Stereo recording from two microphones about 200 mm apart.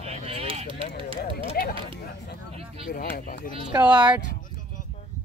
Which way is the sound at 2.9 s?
45° left (ahead or behind).